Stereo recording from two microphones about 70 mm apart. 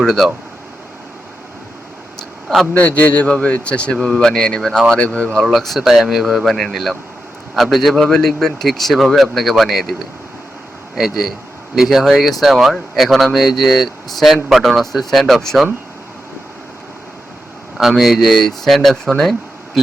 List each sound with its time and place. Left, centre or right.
0.0 s speech: centre
2.7 s a man's voice: centre
5.4 s speech: centre
10.9 s speech: centre
17.7 s speech: centre
19.2 s a sound: centre